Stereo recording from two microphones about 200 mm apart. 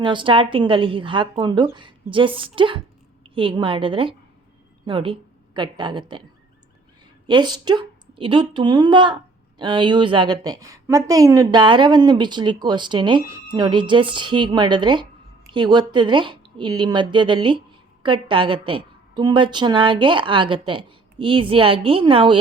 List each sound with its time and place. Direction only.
0.0 s a woman's voice: 25° right (ahead or behind)
7.3 s a woman's voice: 20° right (ahead or behind)